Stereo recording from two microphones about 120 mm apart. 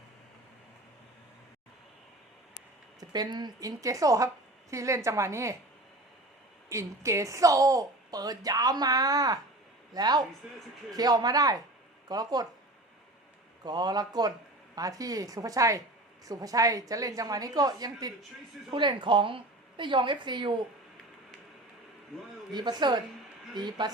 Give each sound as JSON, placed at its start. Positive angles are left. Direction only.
{"t": 3.0, "sound": "a woman's voice", "side_deg": -35}
{"t": 6.7, "sound": "a woman's voice", "side_deg": -25}
{"t": 10.4, "sound": "a man's voice", "side_deg": -5}
{"t": 10.9, "sound": "a woman's voice", "side_deg": -30}
{"t": 13.7, "sound": "a woman's voice", "side_deg": -35}
{"t": 22.5, "sound": "a woman's voice", "side_deg": -35}